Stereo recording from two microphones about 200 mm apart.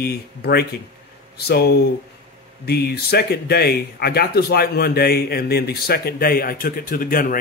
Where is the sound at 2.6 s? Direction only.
55° left (ahead or behind).